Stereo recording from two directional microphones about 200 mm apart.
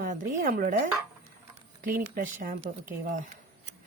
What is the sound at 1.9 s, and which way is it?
Speech, 45° right (ahead or behind).